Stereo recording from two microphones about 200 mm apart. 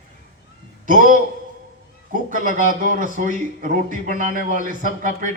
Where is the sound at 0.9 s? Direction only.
40° right (ahead or behind).